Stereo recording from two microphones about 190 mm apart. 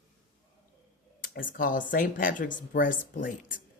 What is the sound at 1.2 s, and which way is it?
Speech, 45° left (ahead or behind).